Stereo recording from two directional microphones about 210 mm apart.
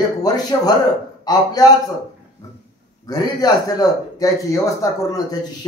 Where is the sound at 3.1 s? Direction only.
20° left (ahead or behind).